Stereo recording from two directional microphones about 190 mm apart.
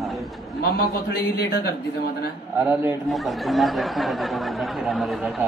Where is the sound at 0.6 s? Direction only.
55° left (ahead or behind).